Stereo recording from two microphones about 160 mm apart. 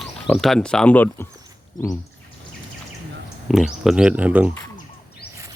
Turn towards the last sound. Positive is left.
turn(degrees=-10)  # may be behind; listen again after turning